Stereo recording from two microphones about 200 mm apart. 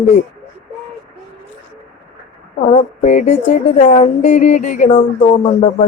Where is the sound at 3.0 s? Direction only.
35° left (ahead or behind).